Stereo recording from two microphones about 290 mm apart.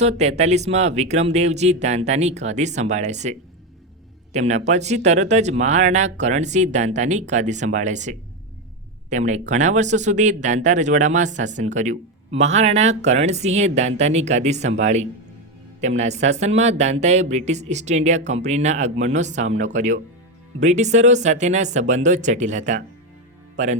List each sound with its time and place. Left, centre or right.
0.0 s speech: right